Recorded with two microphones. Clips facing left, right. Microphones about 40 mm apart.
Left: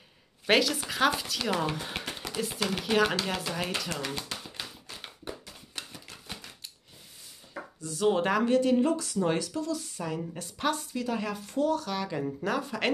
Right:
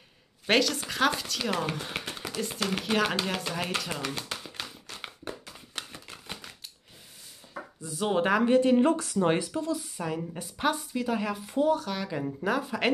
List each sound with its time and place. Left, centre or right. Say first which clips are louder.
0.5 s speech: even; centre
4.1 s a sound: right 1 dB; centre
7.8 s a woman's voice: left 1 dB; centre
8.5 s speech: right 3 dB; right
8.8 s a woman's voice: right 3 dB; right; by 12.9 s centre